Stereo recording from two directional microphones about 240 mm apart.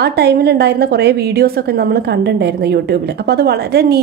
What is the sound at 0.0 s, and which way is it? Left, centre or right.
A woman's voice, right.